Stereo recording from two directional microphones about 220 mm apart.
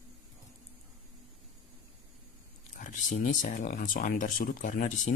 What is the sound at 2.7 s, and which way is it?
Speech, 35° left (ahead or behind).